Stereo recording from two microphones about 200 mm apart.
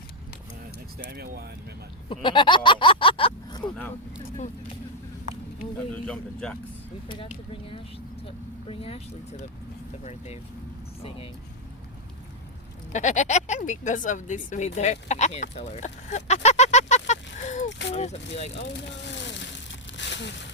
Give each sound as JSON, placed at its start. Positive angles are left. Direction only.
{"t": 0.9, "sound": "speech", "side_deg": -50}
{"t": 2.0, "sound": "a sound", "side_deg": 25}
{"t": 6.1, "sound": "speech", "side_deg": 5}
{"t": 7.1, "sound": "speech", "side_deg": 25}
{"t": 10.0, "sound": "speech", "side_deg": 35}
{"t": 12.9, "sound": "speech", "side_deg": 35}
{"t": 17.7, "sound": "a sound", "side_deg": 60}
{"t": 17.9, "sound": "speech", "side_deg": 35}
{"t": 19.0, "sound": "a sound", "side_deg": 60}